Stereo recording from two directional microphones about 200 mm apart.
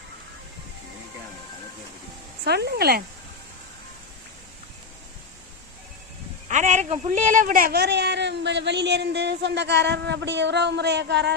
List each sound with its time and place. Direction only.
2.4 s speech: 55° right (ahead or behind)
6.5 s a man's voice: 35° right (ahead or behind); by 11.3 s 55° right (ahead or behind)